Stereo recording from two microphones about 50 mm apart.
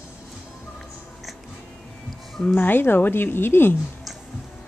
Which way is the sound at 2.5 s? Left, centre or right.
Left.